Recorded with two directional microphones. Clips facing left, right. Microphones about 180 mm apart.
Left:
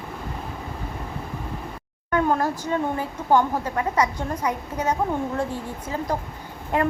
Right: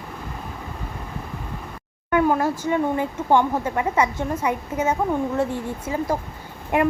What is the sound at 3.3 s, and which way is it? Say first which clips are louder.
A woman's voice: right 1 dB; 20° right (ahead or behind).